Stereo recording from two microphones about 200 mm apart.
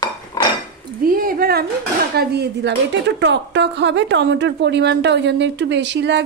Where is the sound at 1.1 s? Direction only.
45° right (ahead or behind).